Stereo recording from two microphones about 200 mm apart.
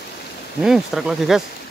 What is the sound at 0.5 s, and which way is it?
Speech, centre (ahead or behind).